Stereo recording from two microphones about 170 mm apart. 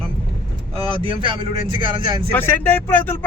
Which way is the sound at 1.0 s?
30° right (ahead or behind).